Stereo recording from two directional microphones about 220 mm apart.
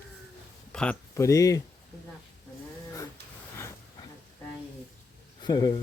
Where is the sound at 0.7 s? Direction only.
5° left (ahead or behind).